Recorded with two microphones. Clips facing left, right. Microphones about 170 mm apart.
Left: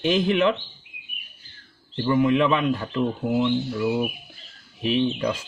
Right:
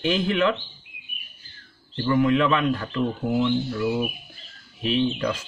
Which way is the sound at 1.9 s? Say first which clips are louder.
Even; 20° left (ahead or behind).